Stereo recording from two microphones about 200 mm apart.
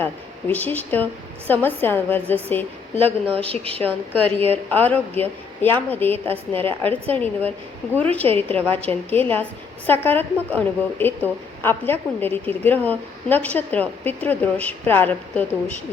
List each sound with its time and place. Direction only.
0.0 s a woman's voice: 10° left (ahead or behind)
3.0 s a woman's voice: 30° right (ahead or behind)
3.8 s a woman's voice: 10° left (ahead or behind)